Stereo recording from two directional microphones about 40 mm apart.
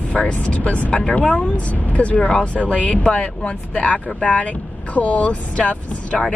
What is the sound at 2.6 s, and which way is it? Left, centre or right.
Speech, left.